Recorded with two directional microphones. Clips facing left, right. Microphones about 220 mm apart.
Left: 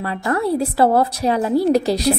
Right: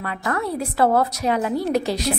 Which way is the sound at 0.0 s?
30° left (ahead or behind).